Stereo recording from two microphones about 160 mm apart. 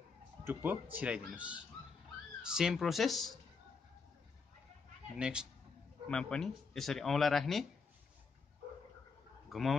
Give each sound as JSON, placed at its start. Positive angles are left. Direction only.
{"t": 0.4, "sound": "speech", "side_deg": -15}
{"t": 5.1, "sound": "speech", "side_deg": -5}
{"t": 6.0, "sound": "speech", "side_deg": 5}
{"t": 9.5, "sound": "speech", "side_deg": 0}